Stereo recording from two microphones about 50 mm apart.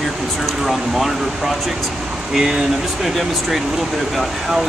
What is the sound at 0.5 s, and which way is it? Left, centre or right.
Speech, centre.